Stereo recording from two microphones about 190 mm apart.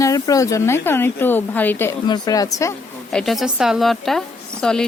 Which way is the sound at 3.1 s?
Centre (ahead or behind).